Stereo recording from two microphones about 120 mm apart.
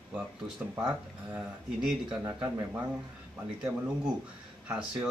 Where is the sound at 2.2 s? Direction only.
20° right (ahead or behind).